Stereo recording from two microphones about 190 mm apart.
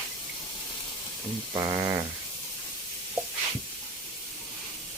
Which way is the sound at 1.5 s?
20° right (ahead or behind).